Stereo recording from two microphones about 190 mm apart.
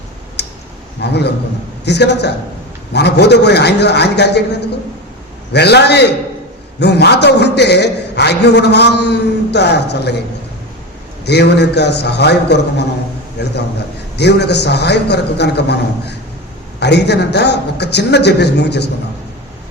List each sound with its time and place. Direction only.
0.4 s clicking: 60° left (ahead or behind)
1.0 s a man's voice: 60° left (ahead or behind)
11.3 s a man's voice: 60° left (ahead or behind)
14.2 s a man's voice: 60° left (ahead or behind)